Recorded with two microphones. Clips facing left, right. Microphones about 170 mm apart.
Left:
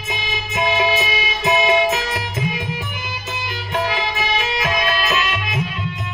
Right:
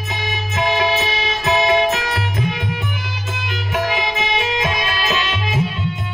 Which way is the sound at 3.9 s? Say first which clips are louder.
Right 1 dB; 15° right (ahead or behind).